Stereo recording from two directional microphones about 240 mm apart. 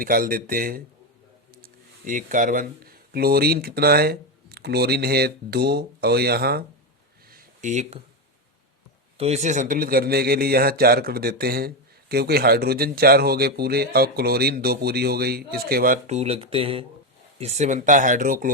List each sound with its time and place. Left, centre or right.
0.0 s a man's voice: right
7.3 s a sound: right
9.1 s a man's voice: right